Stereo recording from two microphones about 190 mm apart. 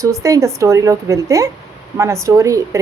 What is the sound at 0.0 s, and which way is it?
A woman's voice, 15° right (ahead or behind).